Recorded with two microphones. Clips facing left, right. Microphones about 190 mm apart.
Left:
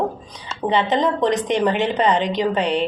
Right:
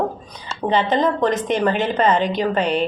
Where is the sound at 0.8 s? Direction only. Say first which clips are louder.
Even; 20° left (ahead or behind).